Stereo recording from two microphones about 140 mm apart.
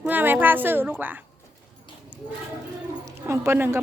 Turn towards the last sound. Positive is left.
turn(degrees=-15)  # may be behind; listen again after turning